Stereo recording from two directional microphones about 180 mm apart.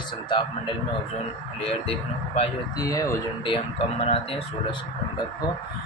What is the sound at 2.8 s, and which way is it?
Speech, 20° left (ahead or behind).